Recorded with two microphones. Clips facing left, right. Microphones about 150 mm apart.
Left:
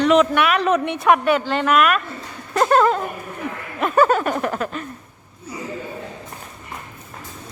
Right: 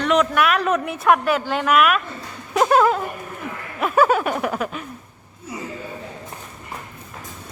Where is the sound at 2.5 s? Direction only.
5° right (ahead or behind).